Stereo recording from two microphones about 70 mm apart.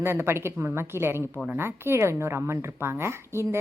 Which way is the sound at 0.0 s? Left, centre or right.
Right.